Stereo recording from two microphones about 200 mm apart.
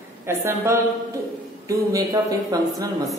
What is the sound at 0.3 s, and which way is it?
Speech, 15° right (ahead or behind).